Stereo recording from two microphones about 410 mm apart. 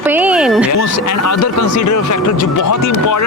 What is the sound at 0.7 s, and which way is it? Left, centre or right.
Speech, left.